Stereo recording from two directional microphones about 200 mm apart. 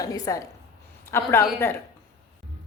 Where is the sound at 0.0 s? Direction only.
15° left (ahead or behind).